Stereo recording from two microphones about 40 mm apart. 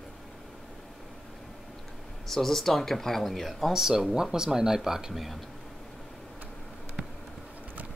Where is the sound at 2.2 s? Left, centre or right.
Centre.